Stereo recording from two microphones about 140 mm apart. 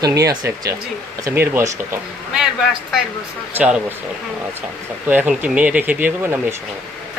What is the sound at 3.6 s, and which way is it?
Speech, 5° right (ahead or behind).